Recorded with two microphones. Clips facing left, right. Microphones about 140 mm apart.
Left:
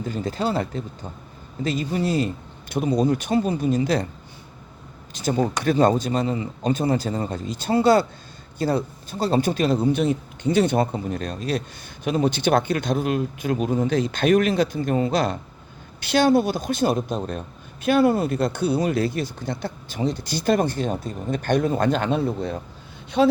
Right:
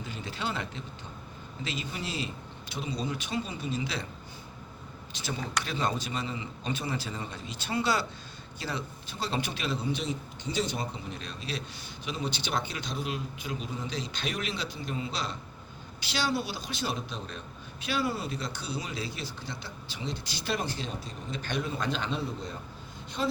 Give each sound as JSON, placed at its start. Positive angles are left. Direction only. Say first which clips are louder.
{"t": 0.0, "sound": "a man's voice", "louder": "left 11 dB", "side_deg": 45}
{"t": 5.1, "sound": "a man's voice", "louder": "left 12 dB", "side_deg": 45}
{"t": 23.2, "sound": "speech", "louder": "left 13 dB", "side_deg": 80}